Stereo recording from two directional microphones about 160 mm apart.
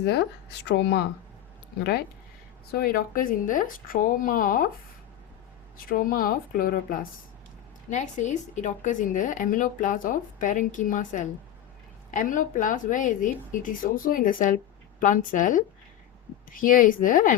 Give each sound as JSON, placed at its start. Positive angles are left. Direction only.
{"t": 0.0, "sound": "speech", "side_deg": 90}
{"t": 2.7, "sound": "speech", "side_deg": 65}
{"t": 5.7, "sound": "speech", "side_deg": 65}
{"t": 7.9, "sound": "a woman's voice", "side_deg": 50}